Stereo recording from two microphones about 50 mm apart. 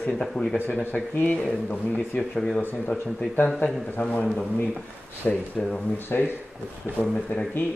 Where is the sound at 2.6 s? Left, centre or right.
Left.